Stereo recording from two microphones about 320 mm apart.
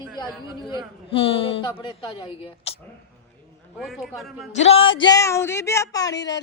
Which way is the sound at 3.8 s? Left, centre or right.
Centre.